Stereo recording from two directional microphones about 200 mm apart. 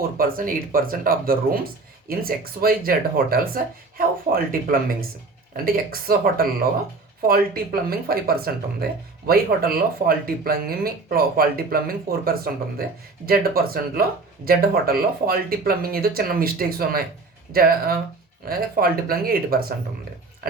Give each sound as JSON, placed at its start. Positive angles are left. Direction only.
{"t": 0.2, "sound": "speech", "side_deg": -45}